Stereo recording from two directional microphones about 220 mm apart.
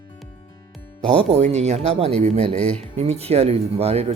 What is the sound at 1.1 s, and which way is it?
Speech, 30° right (ahead or behind).